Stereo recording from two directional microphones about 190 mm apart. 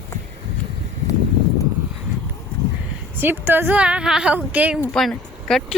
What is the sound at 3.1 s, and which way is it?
Speech, 10° right (ahead or behind).